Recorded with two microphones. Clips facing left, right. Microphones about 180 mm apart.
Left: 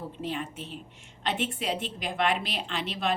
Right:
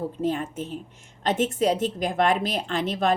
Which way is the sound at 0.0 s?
45° right (ahead or behind).